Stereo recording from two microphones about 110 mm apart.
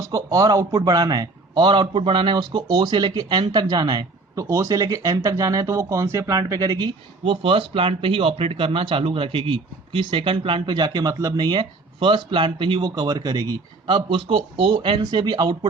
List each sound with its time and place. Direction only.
0.0 s a man's voice: 35° right (ahead or behind)
4.4 s speech: 30° right (ahead or behind)
7.3 s speech: 55° right (ahead or behind)
12.9 s a man's voice: 35° right (ahead or behind)
13.8 s a man's voice: 50° right (ahead or behind)